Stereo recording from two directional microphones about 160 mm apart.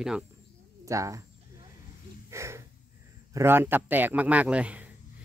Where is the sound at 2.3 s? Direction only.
15° right (ahead or behind).